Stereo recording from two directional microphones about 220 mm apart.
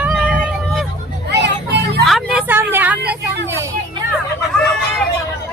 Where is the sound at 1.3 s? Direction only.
50° right (ahead or behind).